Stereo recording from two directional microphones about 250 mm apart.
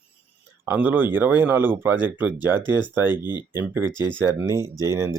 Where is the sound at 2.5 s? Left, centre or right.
Centre.